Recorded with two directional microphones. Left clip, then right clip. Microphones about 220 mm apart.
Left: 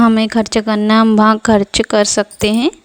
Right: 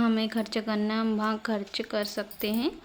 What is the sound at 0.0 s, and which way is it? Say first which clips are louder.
Speech: left 15 dB; 50° left (ahead or behind).